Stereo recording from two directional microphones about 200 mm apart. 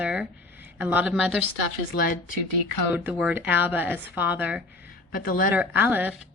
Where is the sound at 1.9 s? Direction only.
45° left (ahead or behind).